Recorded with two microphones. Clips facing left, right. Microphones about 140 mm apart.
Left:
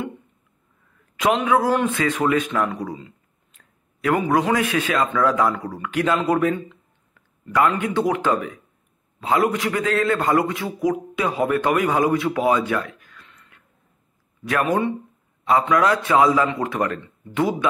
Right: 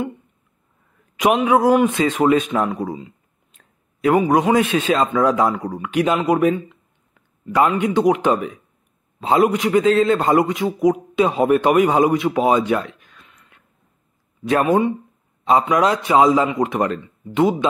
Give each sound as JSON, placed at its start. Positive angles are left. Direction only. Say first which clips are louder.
{"t": 1.4, "sound": "a man's voice", "louder": "right 4 dB", "side_deg": -20}